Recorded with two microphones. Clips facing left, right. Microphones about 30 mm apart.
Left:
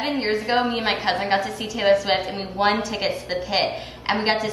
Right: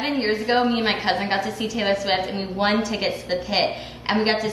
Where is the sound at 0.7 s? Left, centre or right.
Centre.